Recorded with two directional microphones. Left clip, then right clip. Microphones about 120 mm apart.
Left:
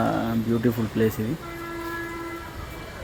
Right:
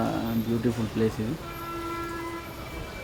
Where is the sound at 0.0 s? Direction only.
20° left (ahead or behind).